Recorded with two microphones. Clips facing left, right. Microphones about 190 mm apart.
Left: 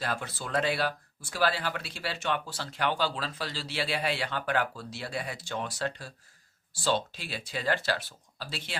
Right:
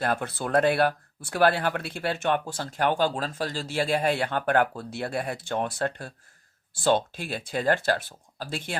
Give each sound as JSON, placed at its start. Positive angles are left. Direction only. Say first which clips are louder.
{"t": 0.0, "sound": "speech", "louder": "right 7 dB", "side_deg": -55}